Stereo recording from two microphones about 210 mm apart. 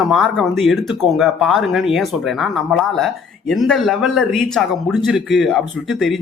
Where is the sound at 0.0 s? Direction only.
Centre (ahead or behind).